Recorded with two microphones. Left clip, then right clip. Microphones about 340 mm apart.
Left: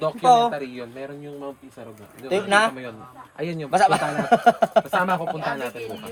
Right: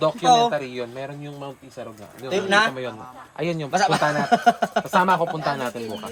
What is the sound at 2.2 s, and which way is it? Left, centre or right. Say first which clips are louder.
Speech: even; right.